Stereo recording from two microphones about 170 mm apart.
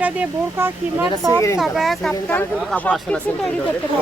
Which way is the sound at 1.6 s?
Centre (ahead or behind).